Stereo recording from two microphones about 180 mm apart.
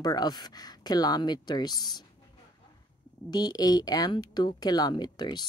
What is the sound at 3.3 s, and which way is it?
Speech, 20° left (ahead or behind).